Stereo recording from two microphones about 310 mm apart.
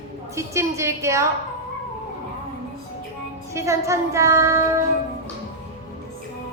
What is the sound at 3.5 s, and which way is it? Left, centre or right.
Child singing, centre.